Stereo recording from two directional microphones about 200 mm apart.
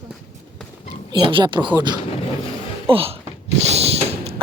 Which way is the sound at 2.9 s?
30° right (ahead or behind).